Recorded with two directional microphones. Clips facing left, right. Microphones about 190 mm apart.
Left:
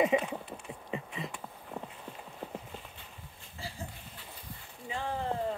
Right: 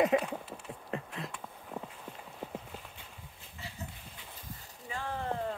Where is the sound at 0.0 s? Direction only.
Centre (ahead or behind).